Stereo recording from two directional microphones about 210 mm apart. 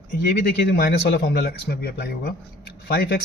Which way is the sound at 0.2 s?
50° left (ahead or behind).